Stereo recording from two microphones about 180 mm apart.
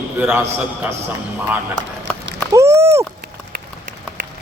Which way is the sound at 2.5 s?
15° right (ahead or behind).